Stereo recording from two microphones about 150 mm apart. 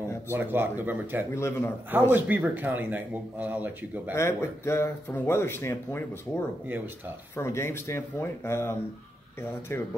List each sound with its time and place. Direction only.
0.3 s speech: 15° right (ahead or behind)
1.3 s speech: 20° left (ahead or behind)
1.9 s speech: 15° right (ahead or behind)
4.1 s speech: 20° left (ahead or behind)
7.3 s speech: 15° left (ahead or behind)